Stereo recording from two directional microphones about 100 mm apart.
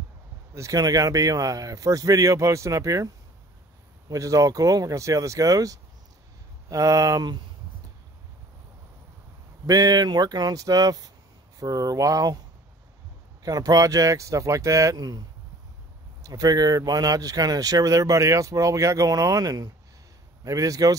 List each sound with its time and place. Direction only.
0.6 s speech: 35° right (ahead or behind)
4.1 s speech: 35° right (ahead or behind)
9.7 s speech: 40° right (ahead or behind)
13.4 s speech: 40° right (ahead or behind)